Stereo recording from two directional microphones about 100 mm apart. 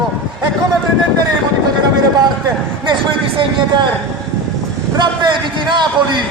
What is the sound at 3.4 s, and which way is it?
Speech, 50° right (ahead or behind).